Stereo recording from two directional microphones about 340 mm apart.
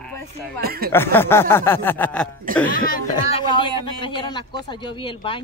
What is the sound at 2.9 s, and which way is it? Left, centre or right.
Speech, centre.